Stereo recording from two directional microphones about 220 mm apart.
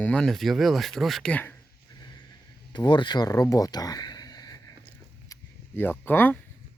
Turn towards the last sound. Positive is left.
turn(degrees=10)  # may be behind; listen again after turning